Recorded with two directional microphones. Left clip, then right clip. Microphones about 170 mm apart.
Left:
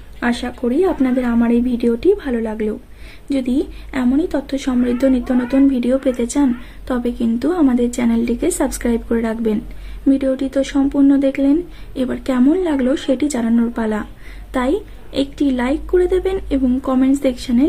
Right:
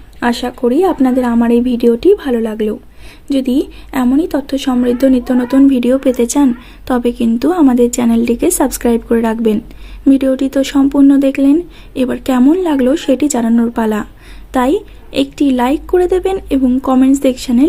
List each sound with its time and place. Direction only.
0.2 s a woman's voice: 35° right (ahead or behind)